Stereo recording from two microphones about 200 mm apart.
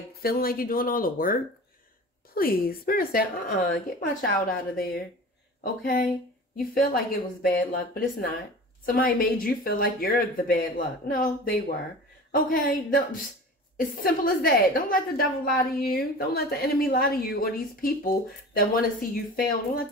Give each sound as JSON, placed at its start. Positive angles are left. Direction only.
{"t": 0.2, "sound": "a woman's voice", "side_deg": 50}